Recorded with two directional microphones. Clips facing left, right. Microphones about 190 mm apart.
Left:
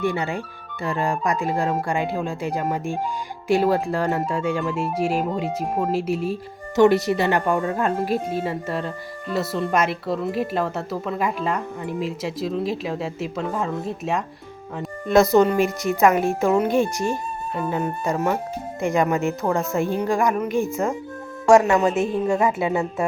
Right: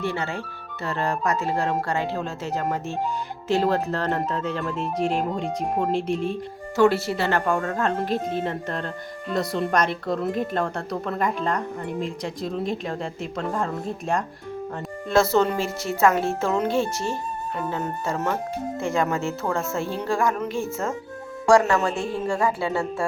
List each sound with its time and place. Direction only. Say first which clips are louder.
0.0 s speech: left 3 dB; 15° left (ahead or behind)
6.7 s a woman's voice: left 3 dB; 20° left (ahead or behind); by 14.3 s centre (ahead or behind)
15.1 s speech: left 4 dB; 15° left (ahead or behind)